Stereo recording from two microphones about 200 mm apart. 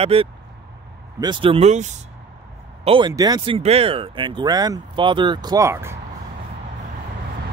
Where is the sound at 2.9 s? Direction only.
25° right (ahead or behind).